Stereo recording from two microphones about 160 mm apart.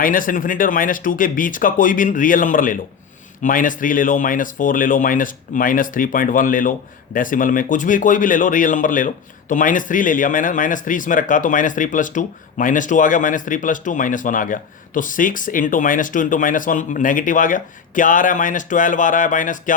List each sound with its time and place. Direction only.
0.0 s speech: 60° left (ahead or behind)